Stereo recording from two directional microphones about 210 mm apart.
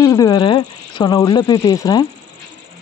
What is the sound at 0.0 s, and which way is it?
Speech, 15° left (ahead or behind).